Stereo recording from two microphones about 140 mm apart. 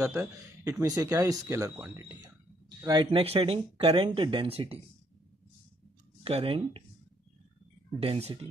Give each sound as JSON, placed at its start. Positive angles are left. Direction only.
{"t": 0.0, "sound": "speech", "side_deg": -20}
{"t": 6.2, "sound": "speech", "side_deg": -45}
{"t": 8.0, "sound": "speech", "side_deg": -45}